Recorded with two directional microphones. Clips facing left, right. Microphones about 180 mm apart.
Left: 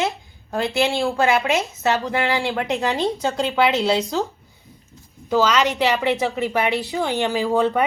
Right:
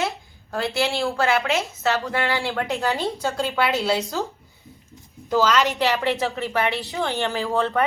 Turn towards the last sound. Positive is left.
turn(degrees=15)  # may be behind; listen again after turning